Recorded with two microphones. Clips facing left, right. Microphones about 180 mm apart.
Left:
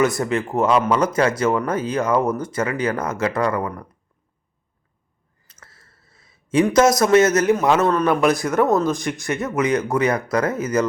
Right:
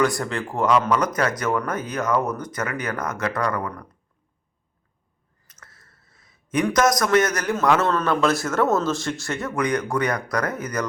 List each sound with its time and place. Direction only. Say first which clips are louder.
0.2 s speech: left 4 dB; 20° left (ahead or behind)
5.5 s speech: left 1 dB; 30° left (ahead or behind)